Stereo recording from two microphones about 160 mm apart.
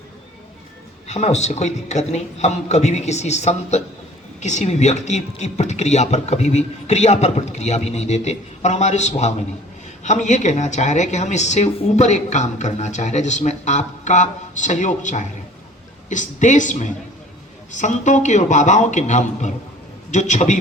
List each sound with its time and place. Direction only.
1.0 s speech: 45° left (ahead or behind)